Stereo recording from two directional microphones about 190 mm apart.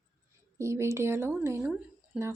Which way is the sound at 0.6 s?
15° right (ahead or behind).